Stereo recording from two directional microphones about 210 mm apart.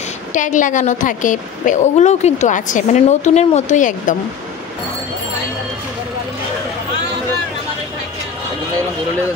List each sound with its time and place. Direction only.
0.3 s a woman's voice: 35° left (ahead or behind)